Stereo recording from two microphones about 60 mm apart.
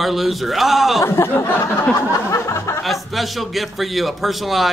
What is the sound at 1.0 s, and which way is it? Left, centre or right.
Speech, left.